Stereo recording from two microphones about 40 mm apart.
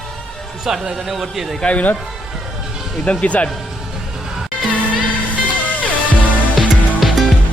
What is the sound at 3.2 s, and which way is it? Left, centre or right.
Speech, left.